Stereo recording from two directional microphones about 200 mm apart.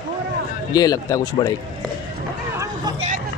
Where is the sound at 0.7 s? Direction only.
20° left (ahead or behind).